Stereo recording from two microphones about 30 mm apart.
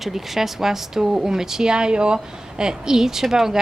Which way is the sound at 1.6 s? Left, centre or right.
Right.